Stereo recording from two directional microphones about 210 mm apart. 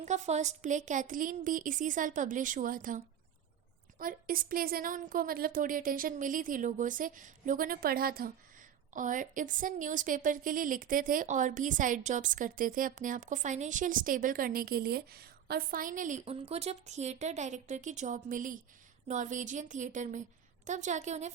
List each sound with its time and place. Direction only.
0.0 s a woman's voice: 35° right (ahead or behind)